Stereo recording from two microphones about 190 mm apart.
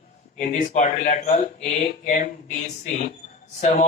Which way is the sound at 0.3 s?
40° left (ahead or behind).